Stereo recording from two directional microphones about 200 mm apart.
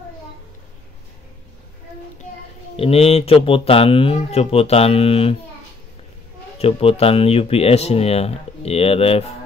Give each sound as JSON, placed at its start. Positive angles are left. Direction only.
{"t": 2.7, "sound": "speech", "side_deg": 30}
{"t": 6.6, "sound": "speech", "side_deg": 30}